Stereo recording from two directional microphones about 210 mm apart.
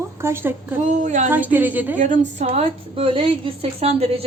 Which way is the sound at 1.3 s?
10° right (ahead or behind).